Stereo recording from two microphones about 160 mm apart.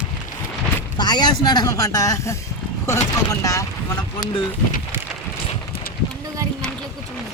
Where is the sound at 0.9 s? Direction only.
25° left (ahead or behind).